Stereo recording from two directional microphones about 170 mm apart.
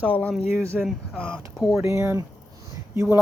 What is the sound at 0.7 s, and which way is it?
Speech, 5° right (ahead or behind).